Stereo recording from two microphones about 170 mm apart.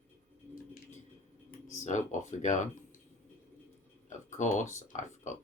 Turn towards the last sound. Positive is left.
turn(degrees=45)  # may be behind; listen again after turning